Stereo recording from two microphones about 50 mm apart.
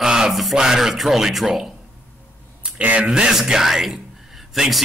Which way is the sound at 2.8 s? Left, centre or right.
Right.